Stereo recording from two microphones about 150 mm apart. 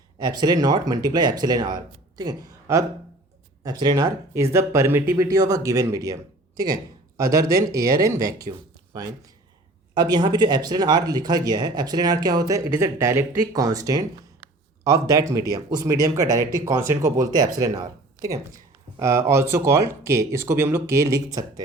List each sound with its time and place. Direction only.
0.2 s speech: 25° right (ahead or behind)